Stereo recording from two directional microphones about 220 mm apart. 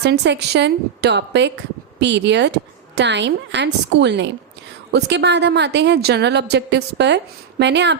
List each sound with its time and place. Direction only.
0.0 s speech: 50° right (ahead or behind)